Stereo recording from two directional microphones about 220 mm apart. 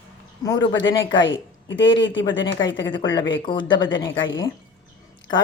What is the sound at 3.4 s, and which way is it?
Speech, 20° left (ahead or behind).